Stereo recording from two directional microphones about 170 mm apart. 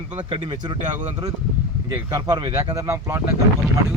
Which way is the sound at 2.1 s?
25° right (ahead or behind).